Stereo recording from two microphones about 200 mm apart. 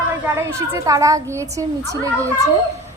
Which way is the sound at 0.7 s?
15° right (ahead or behind).